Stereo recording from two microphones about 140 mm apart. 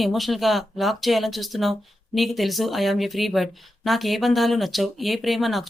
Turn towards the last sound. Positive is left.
turn(degrees=0)  # may be behind; listen again after turning